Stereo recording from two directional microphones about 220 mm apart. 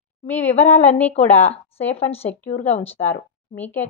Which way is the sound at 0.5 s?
30° left (ahead or behind).